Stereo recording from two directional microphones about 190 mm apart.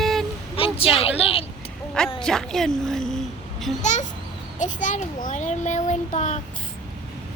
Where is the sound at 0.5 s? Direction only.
30° left (ahead or behind).